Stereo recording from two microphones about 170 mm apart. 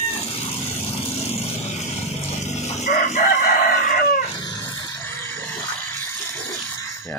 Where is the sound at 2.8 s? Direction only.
50° left (ahead or behind).